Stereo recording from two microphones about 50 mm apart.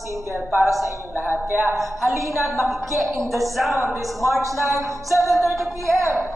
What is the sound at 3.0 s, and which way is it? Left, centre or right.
Speech, right.